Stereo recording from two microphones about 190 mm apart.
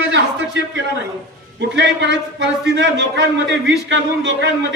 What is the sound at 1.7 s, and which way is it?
A man's voice, 65° right (ahead or behind).